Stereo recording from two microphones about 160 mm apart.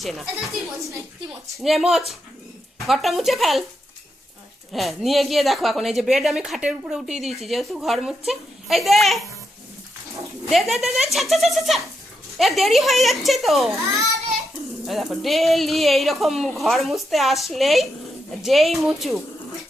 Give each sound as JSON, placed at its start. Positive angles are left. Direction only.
{"t": 0.0, "sound": "speech", "side_deg": 0}
{"t": 4.7, "sound": "speech", "side_deg": 0}
{"t": 10.5, "sound": "speech", "side_deg": 0}
{"t": 13.7, "sound": "a child's voice", "side_deg": -20}
{"t": 14.8, "sound": "speech", "side_deg": 0}